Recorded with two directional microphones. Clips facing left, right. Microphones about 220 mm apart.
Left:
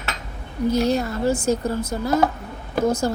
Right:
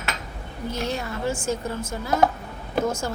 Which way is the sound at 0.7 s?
40° left (ahead or behind).